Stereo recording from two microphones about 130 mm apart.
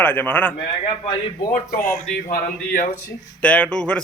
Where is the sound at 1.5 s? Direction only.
90° left.